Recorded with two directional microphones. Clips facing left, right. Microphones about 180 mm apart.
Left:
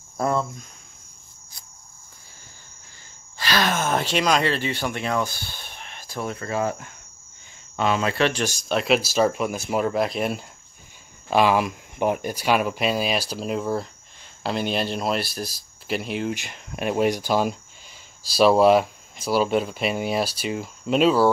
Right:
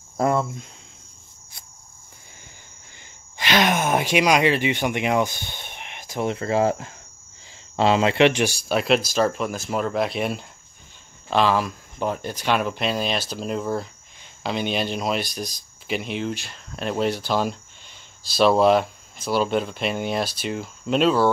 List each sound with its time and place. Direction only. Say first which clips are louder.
3.3 s speech: right 3 dB; 20° right (ahead or behind); by 10.4 s centre (ahead or behind)
11.2 s speech: left 1 dB; 10° left (ahead or behind)
16.3 s speech: left 2 dB; 15° left (ahead or behind)